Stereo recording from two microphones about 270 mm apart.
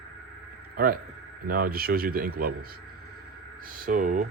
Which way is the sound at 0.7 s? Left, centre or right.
Right.